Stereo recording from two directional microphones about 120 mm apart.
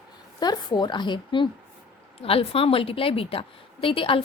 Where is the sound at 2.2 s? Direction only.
50° left (ahead or behind).